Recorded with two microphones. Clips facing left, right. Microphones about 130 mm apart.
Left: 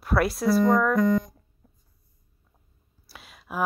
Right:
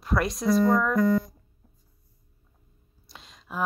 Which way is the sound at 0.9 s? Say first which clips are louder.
Left 1 dB; 20° left (ahead or behind).